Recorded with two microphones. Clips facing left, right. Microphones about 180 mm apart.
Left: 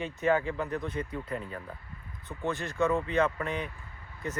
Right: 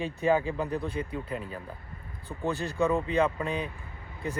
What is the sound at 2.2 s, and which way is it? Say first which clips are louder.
Speech: right 2 dB; 35° right (ahead or behind).